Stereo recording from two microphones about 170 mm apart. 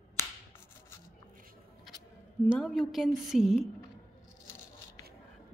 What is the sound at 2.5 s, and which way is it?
A woman's voice, centre (ahead or behind).